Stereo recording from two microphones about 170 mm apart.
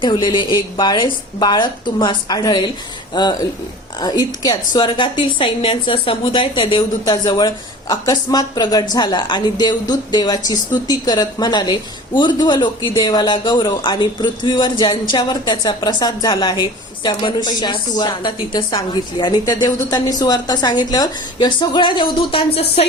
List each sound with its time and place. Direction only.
0.0 s a woman's voice: 25° left (ahead or behind)